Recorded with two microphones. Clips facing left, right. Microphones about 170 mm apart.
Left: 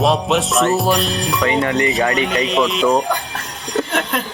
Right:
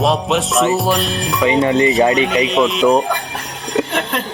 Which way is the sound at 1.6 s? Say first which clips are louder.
Right 4 dB; 20° right (ahead or behind).